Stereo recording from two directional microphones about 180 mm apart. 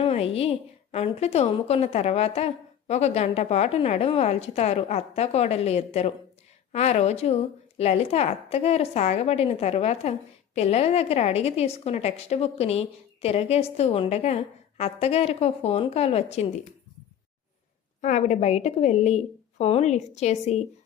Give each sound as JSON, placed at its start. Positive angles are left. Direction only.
{"t": 0.0, "sound": "a woman's voice", "side_deg": 35}
{"t": 18.0, "sound": "a woman's voice", "side_deg": 40}